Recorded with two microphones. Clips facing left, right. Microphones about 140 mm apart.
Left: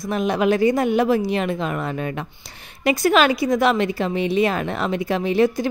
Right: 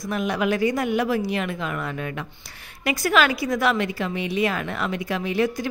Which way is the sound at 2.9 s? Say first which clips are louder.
Left 4 dB; 25° left (ahead or behind).